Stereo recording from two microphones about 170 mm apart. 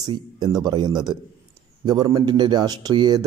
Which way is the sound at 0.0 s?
25° right (ahead or behind).